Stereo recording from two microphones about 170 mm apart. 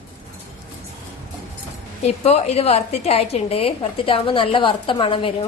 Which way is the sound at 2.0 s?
40° left (ahead or behind).